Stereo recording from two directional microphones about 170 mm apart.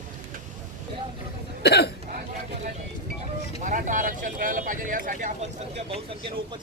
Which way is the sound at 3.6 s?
50° right (ahead or behind).